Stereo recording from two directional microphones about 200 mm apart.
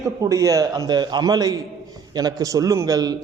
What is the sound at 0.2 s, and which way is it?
A man's voice, 15° right (ahead or behind).